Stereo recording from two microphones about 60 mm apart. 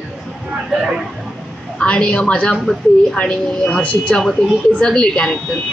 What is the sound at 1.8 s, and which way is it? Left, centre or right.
A woman's voice, centre.